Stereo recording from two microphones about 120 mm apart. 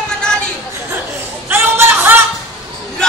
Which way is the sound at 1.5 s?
20° right (ahead or behind).